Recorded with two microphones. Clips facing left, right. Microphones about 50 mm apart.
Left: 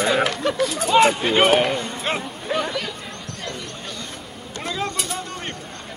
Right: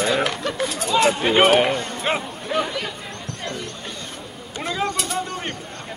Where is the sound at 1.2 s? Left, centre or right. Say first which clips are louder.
Right 1 dB; centre.